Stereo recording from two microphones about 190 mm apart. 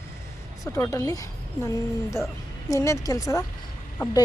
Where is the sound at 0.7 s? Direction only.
15° left (ahead or behind).